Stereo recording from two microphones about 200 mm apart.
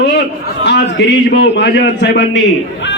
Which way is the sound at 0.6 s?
60° left (ahead or behind).